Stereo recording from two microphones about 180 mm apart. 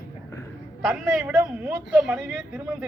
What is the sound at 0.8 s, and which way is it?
Speech, centre (ahead or behind).